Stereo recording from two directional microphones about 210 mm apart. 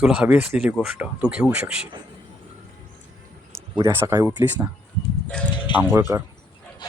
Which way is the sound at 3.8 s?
15° right (ahead or behind).